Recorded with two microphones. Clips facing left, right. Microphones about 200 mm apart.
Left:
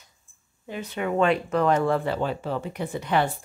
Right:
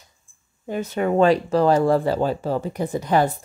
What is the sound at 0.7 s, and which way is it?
Speech, 45° right (ahead or behind).